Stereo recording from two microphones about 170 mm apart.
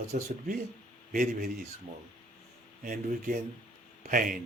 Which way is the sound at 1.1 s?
55° right (ahead or behind).